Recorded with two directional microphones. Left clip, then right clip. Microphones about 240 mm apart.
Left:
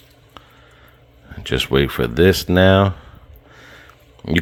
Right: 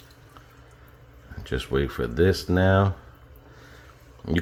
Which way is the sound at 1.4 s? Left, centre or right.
Left.